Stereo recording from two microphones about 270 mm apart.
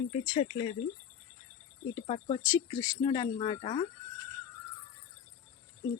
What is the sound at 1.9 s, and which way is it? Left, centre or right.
Speech, centre.